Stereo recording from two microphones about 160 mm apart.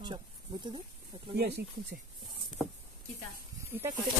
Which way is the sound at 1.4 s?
90° right.